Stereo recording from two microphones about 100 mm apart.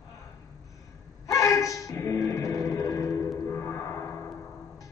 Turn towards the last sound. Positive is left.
turn(degrees=25)  # may be behind; listen again after turning